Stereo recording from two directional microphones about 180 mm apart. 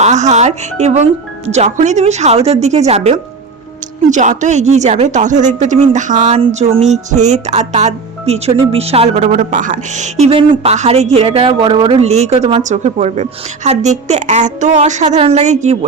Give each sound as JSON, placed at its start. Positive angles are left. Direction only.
{"t": 0.0, "sound": "speech", "side_deg": -40}